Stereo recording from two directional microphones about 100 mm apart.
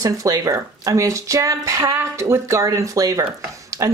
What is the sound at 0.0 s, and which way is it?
Speech, 35° right (ahead or behind).